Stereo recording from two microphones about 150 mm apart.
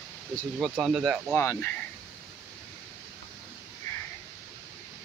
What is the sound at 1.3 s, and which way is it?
Speech, 15° left (ahead or behind).